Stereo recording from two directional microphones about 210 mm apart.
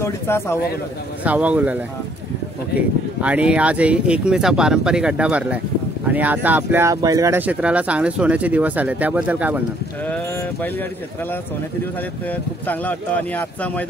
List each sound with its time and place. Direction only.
0.0 s speech: 10° left (ahead or behind)
1.2 s speech: 5° right (ahead or behind)
3.2 s speech: 5° right (ahead or behind)
10.0 s speech: 10° left (ahead or behind)
12.3 s speech: 5° left (ahead or behind)